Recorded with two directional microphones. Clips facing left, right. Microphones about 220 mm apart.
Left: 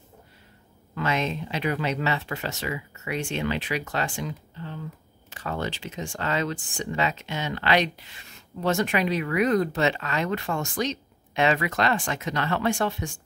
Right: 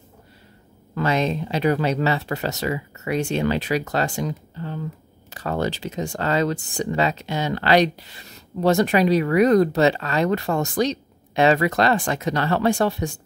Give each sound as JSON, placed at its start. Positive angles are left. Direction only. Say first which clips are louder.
{"t": 0.9, "sound": "speech", "louder": "right 5 dB", "side_deg": -35}